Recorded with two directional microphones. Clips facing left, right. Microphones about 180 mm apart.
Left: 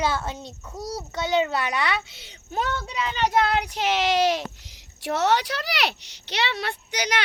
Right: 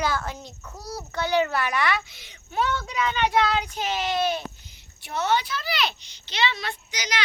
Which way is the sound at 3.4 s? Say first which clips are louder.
Left 1 dB; 60° left (ahead or behind).